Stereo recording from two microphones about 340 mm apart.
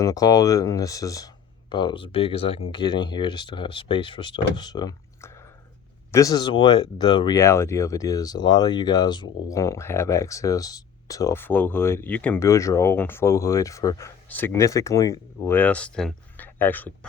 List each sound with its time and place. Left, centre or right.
0.0 s speech: centre